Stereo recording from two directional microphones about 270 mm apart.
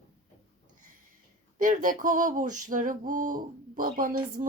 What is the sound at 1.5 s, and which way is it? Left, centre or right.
Speech, right.